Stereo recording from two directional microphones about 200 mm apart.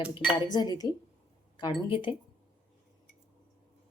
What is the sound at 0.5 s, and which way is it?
Cutlery, 20° left (ahead or behind).